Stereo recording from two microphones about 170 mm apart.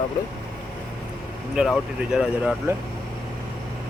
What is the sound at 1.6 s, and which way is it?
Speech, centre (ahead or behind).